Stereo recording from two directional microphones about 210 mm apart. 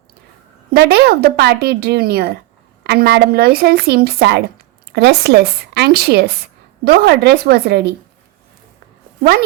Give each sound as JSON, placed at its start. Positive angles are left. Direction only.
{"t": 0.7, "sound": "a woman's voice", "side_deg": -50}